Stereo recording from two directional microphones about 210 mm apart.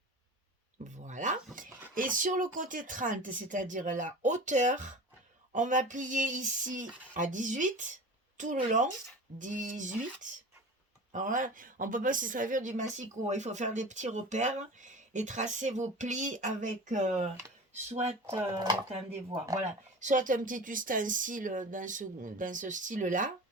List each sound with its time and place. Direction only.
0.9 s speech: 35° right (ahead or behind)
20.0 s speech: 35° right (ahead or behind)